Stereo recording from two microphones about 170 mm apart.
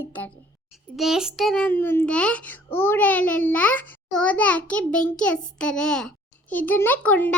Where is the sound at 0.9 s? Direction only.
Centre (ahead or behind).